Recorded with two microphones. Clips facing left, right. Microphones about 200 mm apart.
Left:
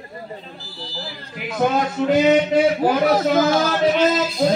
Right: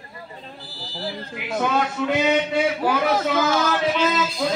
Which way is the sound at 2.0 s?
40° left (ahead or behind).